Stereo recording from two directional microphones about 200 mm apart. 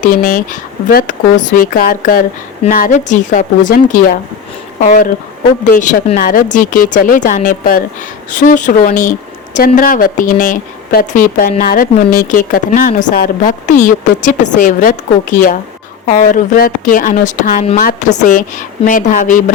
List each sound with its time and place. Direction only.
0.0 s a woman's voice: 45° left (ahead or behind)